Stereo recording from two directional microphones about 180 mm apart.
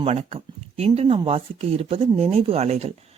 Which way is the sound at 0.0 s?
35° right (ahead or behind).